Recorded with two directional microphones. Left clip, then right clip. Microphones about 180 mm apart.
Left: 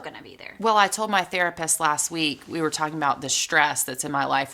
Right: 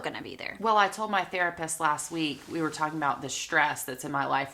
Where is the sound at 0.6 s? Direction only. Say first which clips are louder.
Left 5 dB; 30° left (ahead or behind).